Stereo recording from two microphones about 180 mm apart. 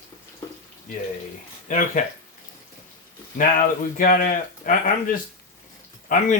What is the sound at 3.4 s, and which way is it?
Speech, 50° left (ahead or behind).